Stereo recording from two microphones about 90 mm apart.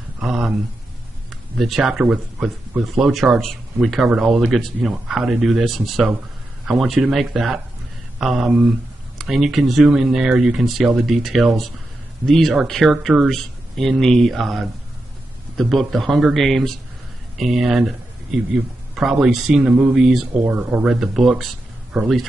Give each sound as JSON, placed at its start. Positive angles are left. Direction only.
{"t": 0.2, "sound": "speech", "side_deg": -5}
{"t": 19.7, "sound": "speech", "side_deg": -15}
{"t": 20.0, "sound": "speech", "side_deg": -5}
{"t": 20.4, "sound": "speech", "side_deg": -15}
{"t": 20.9, "sound": "speech", "side_deg": -5}